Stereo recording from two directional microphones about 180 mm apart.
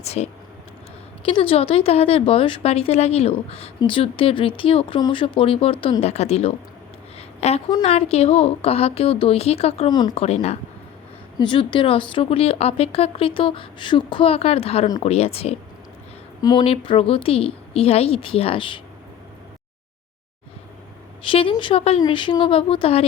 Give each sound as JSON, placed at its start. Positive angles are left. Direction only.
{"t": 0.0, "sound": "speech", "side_deg": 35}
{"t": 7.2, "sound": "a sound", "side_deg": 35}
{"t": 7.9, "sound": "speech", "side_deg": 35}
{"t": 11.3, "sound": "speech", "side_deg": 25}
{"t": 16.4, "sound": "speech", "side_deg": 20}
{"t": 21.2, "sound": "speech", "side_deg": 30}